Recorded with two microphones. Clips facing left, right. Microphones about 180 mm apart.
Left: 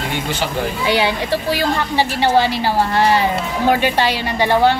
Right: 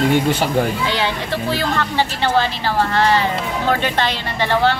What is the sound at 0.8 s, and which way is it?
A woman's voice, 10° left (ahead or behind).